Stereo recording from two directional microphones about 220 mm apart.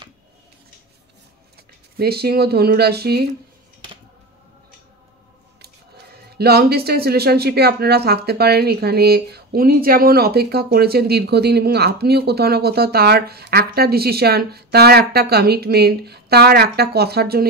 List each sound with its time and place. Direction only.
2.0 s speech: 45° right (ahead or behind)
6.3 s speech: 45° right (ahead or behind)